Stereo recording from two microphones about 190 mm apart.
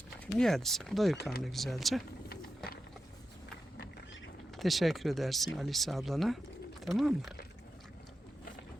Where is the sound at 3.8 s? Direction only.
60° left (ahead or behind).